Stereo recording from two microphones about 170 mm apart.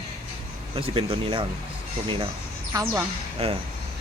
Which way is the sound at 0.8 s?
30° right (ahead or behind).